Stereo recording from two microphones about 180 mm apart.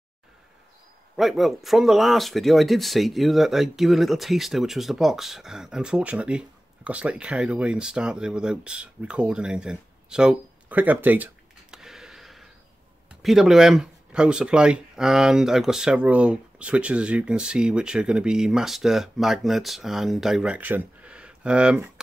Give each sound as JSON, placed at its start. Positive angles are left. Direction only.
{"t": 1.1, "sound": "speech", "side_deg": 0}